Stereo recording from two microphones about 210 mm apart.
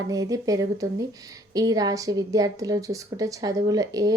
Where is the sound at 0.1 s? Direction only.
15° right (ahead or behind).